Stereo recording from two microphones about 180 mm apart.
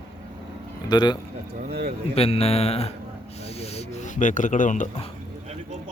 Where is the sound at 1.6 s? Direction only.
60° right (ahead or behind).